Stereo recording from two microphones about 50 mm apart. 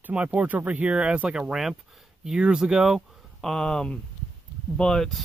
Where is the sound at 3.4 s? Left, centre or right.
Centre.